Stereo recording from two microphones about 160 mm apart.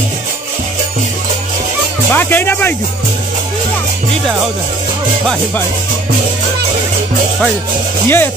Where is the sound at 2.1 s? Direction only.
15° left (ahead or behind).